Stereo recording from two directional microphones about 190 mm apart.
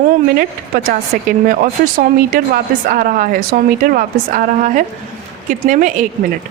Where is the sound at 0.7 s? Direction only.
50° right (ahead or behind).